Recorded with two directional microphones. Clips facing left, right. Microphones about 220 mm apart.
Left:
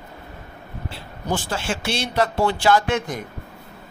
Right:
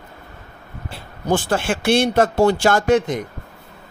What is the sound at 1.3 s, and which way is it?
A man's voice, 55° right (ahead or behind).